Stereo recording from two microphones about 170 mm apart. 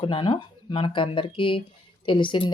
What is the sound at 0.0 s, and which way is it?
Speech, 30° left (ahead or behind).